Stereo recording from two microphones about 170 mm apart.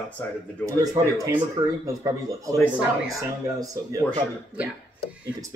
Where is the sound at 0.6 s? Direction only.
20° right (ahead or behind).